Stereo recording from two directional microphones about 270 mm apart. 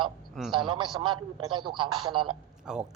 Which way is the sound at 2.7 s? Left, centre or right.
Centre.